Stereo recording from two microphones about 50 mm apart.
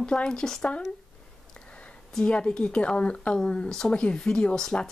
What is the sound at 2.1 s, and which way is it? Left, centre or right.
Speech, centre.